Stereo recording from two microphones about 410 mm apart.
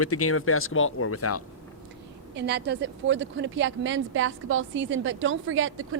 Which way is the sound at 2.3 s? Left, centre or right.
Right.